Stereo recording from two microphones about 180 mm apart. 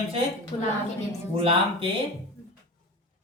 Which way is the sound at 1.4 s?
30° right (ahead or behind).